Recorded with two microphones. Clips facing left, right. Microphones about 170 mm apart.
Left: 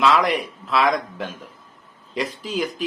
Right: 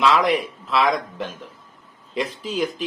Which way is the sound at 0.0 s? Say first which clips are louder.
Even; centre (ahead or behind).